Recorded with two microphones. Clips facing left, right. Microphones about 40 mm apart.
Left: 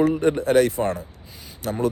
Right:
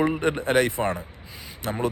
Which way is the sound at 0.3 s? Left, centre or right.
Right.